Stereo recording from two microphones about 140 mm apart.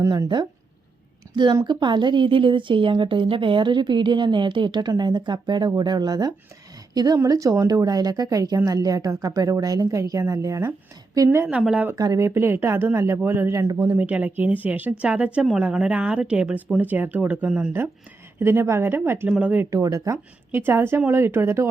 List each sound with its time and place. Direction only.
0.0 s a woman's voice: 25° right (ahead or behind)
11.4 s a woman's voice: 5° right (ahead or behind)
11.9 s a woman's voice: 25° right (ahead or behind)
13.9 s a woman's voice: 10° right (ahead or behind)
19.7 s a woman's voice: 25° right (ahead or behind)